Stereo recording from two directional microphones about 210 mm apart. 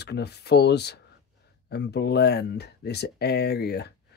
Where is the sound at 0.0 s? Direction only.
50° left (ahead or behind).